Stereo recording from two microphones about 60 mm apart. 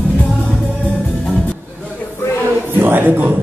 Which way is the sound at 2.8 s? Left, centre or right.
Right.